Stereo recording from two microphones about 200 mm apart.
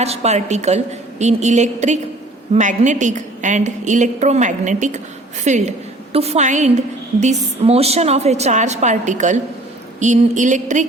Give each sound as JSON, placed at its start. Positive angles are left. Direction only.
{"t": 0.0, "sound": "a woman's voice", "side_deg": -30}